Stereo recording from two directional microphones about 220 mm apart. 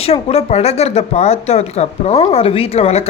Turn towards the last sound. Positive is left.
turn(degrees=25)  # may be behind; listen again after turning